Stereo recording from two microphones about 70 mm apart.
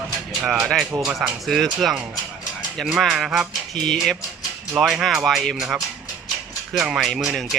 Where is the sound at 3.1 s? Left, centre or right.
Centre.